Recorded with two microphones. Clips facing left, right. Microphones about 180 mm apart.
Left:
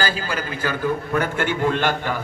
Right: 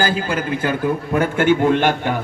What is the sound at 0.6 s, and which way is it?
Speech, 20° right (ahead or behind).